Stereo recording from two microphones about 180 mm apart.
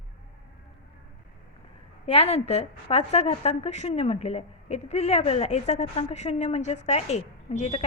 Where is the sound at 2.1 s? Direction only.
35° left (ahead or behind).